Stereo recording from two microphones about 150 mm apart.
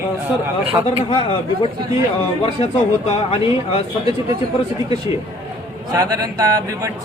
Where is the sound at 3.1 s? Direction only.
40° left (ahead or behind).